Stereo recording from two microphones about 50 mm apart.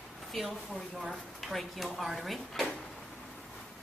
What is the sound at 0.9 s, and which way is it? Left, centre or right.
A woman's voice, centre.